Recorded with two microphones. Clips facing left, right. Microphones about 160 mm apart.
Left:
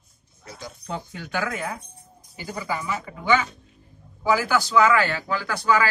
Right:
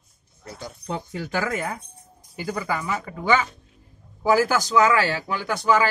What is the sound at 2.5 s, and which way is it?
Speech, 50° right (ahead or behind).